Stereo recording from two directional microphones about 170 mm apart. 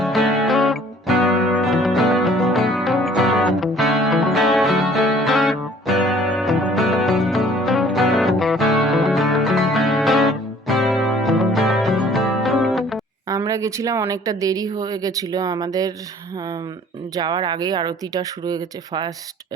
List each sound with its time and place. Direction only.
0.0 s music: centre (ahead or behind)
13.2 s speech: 20° right (ahead or behind)
17.2 s speech: 25° right (ahead or behind)